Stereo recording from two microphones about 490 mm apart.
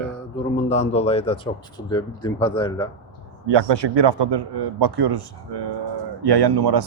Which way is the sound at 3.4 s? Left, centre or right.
Right.